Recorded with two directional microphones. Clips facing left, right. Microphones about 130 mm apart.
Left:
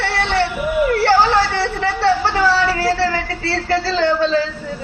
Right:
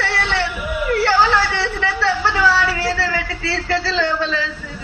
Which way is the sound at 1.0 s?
35° left (ahead or behind).